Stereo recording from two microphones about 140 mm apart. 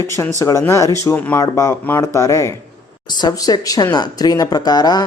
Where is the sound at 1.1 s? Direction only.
10° left (ahead or behind).